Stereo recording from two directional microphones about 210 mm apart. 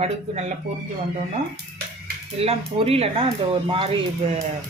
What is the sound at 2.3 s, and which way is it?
A man's voice, 30° right (ahead or behind).